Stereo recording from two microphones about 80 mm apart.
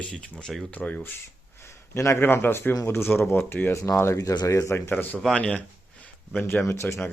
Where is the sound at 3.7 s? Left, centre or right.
Left.